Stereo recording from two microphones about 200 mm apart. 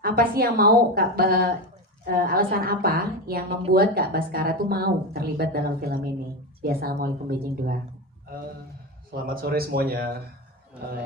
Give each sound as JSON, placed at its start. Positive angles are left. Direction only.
{"t": 0.0, "sound": "a woman's voice", "side_deg": -50}
{"t": 9.2, "sound": "a woman's voice", "side_deg": -50}